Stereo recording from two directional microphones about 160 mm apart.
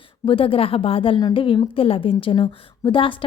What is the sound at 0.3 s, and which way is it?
A woman's voice, 35° left (ahead or behind).